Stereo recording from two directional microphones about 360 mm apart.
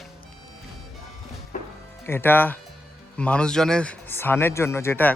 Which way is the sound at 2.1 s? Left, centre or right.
Centre.